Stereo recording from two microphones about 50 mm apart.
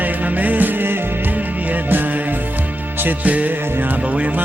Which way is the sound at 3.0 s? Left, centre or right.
Right.